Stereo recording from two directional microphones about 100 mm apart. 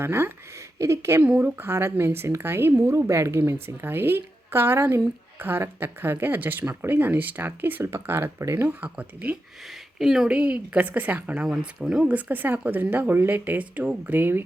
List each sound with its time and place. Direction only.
0.0 s a woman's voice: 25° right (ahead or behind)
1.2 s a woman's voice: 15° right (ahead or behind)
8.6 s speech: 15° right (ahead or behind)
9.6 s speech: 5° right (ahead or behind); by 14.4 s 20° right (ahead or behind)